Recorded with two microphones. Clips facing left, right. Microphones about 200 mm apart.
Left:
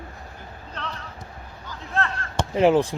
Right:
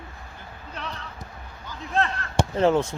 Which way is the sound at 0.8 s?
10° right (ahead or behind).